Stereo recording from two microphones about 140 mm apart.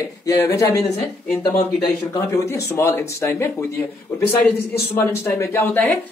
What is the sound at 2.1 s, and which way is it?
Speech, 20° left (ahead or behind).